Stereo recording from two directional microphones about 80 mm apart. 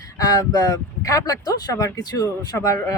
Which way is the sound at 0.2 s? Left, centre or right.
Left.